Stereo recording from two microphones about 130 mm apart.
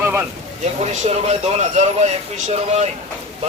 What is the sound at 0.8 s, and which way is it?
Speech, 55° right (ahead or behind).